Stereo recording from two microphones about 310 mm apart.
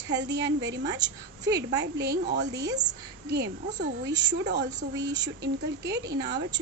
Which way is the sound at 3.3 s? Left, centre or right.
Right.